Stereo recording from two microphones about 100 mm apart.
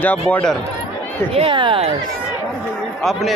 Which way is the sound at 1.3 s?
65° right (ahead or behind).